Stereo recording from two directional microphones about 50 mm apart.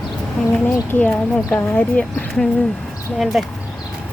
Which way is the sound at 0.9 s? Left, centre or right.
Left.